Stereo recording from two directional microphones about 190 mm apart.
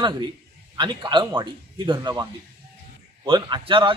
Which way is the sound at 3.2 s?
25° right (ahead or behind).